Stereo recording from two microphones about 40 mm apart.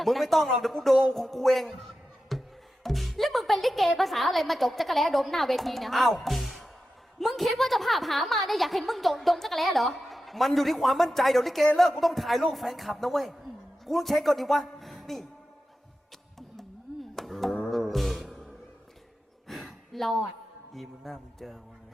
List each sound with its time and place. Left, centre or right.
0.0 s a woman's voice: centre
6.2 s music: centre
7.2 s a woman's voice: centre
14.8 s music: centre
16.6 s music: centre
19.5 s a sound: centre
20.7 s a woman's voice: centre